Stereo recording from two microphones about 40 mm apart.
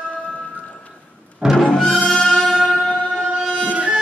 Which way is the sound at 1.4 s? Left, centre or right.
Centre.